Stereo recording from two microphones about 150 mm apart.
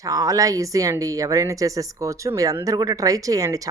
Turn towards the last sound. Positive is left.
turn(degrees=-20)  # may be behind; listen again after turning